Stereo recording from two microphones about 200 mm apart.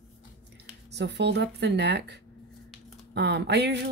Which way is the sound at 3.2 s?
60° right (ahead or behind).